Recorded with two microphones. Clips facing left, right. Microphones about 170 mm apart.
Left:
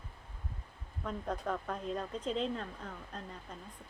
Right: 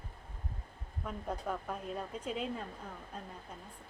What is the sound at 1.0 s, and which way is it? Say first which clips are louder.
Speech: left 2 dB; 10° right (ahead or behind).